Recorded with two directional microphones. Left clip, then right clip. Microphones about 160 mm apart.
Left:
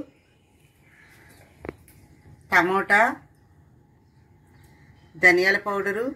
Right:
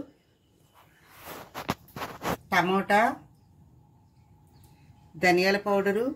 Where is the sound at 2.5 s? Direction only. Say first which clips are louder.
Left 5 dB; 35° right (ahead or behind).